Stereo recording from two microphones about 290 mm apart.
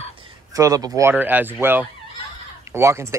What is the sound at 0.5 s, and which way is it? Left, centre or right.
Speech, centre.